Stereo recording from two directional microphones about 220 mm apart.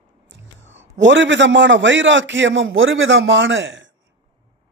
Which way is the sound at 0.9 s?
55° right (ahead or behind).